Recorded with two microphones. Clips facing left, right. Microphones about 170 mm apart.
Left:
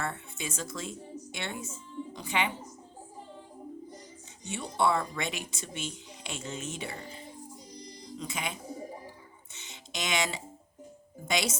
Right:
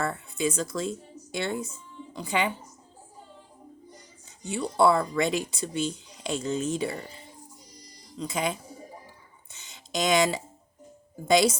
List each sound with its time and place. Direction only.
0.0 s speech: 35° right (ahead or behind)
4.5 s speech: 35° right (ahead or behind)
8.2 s speech: 35° right (ahead or behind)
9.5 s a sound: 35° right (ahead or behind)
11.3 s speech: 35° right (ahead or behind)